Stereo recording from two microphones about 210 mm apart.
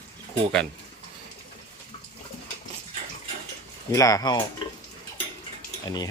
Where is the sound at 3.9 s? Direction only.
15° left (ahead or behind).